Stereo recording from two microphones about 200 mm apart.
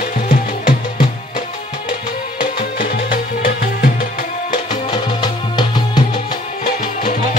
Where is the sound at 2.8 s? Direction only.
45° left (ahead or behind).